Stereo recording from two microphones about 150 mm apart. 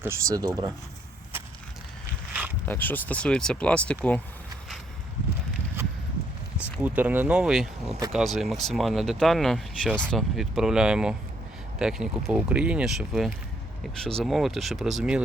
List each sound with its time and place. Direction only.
0.0 s speech: 20° right (ahead or behind)
2.6 s speech: 10° left (ahead or behind)
5.8 s a sound: 15° right (ahead or behind)
6.8 s speech: 10° right (ahead or behind)